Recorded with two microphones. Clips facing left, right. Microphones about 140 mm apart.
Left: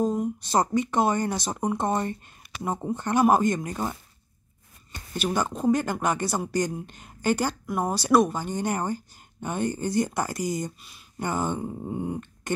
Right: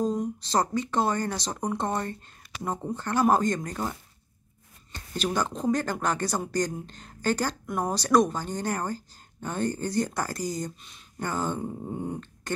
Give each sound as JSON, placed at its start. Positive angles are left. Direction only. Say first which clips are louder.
{"t": 0.0, "sound": "speech", "louder": "left 2 dB", "side_deg": 10}
{"t": 11.2, "sound": "speech", "louder": "left 2 dB", "side_deg": 15}
{"t": 11.6, "sound": "a sound", "louder": "left 2 dB", "side_deg": 5}